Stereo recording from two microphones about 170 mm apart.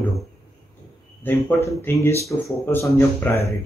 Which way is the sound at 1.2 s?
10° left (ahead or behind).